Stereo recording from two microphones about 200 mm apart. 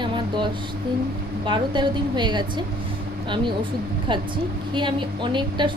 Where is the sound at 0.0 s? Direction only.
25° right (ahead or behind).